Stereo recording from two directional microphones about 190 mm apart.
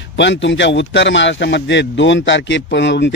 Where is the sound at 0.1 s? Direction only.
70° left (ahead or behind).